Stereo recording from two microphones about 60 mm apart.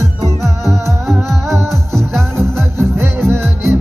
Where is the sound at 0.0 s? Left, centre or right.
Right.